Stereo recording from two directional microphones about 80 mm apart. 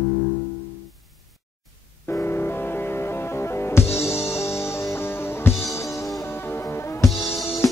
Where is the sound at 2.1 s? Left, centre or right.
Left.